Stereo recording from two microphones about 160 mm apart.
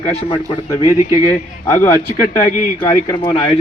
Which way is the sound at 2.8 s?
30° left (ahead or behind).